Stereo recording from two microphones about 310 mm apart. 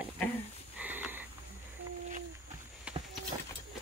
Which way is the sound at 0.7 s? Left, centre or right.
Centre.